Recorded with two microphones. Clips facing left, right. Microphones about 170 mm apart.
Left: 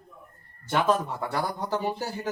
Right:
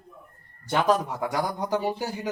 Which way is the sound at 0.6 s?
10° right (ahead or behind).